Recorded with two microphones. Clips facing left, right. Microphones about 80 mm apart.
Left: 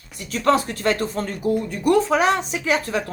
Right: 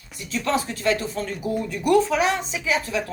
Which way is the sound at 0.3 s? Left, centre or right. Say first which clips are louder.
Left 5 dB; left.